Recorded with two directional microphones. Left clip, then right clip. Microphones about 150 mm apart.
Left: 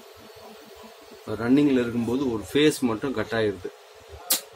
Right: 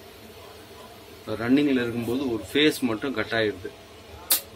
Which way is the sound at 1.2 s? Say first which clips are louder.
Left 1 dB; 25° left (ahead or behind).